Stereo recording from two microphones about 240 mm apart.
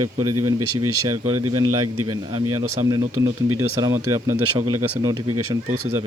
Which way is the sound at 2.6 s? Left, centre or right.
Centre.